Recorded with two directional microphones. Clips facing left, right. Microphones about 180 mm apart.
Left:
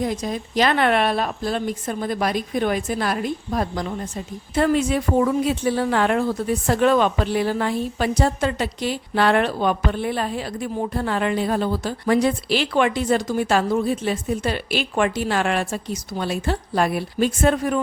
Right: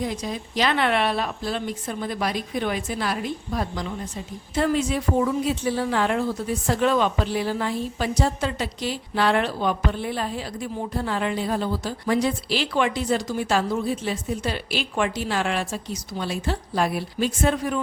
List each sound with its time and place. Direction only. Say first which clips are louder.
0.0 s a woman's voice: left 4 dB; 50° left (ahead or behind)